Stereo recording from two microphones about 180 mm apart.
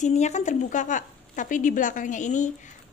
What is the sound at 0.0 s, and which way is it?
A woman's voice, 40° left (ahead or behind).